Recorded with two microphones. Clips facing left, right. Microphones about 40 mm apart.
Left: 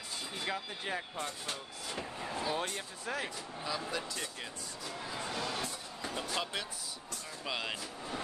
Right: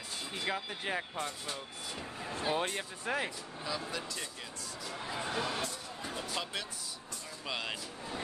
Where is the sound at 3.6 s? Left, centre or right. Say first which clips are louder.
Left 1 dB; centre.